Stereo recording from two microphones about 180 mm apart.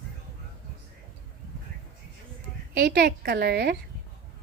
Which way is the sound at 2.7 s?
65° right (ahead or behind).